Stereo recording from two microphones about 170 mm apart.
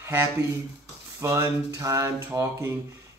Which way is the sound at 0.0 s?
15° right (ahead or behind).